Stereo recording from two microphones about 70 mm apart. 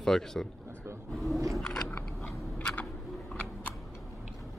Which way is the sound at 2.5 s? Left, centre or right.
Left.